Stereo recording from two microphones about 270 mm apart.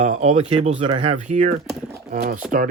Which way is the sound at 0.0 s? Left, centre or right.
Right.